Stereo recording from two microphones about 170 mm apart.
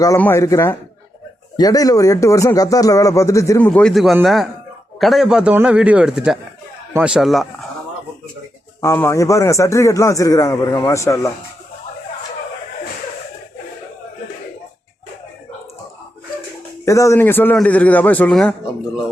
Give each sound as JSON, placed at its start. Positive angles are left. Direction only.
{"t": 0.2, "sound": "a man's voice", "side_deg": 15}
{"t": 3.7, "sound": "a man's voice", "side_deg": 5}
{"t": 8.8, "sound": "a man's voice", "side_deg": 15}
{"t": 16.8, "sound": "a man's voice", "side_deg": 15}